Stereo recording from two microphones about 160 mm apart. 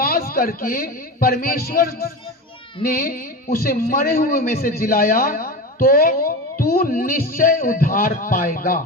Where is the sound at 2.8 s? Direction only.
65° left (ahead or behind).